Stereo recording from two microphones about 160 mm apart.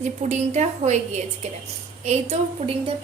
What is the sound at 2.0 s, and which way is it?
Speech, 40° right (ahead or behind).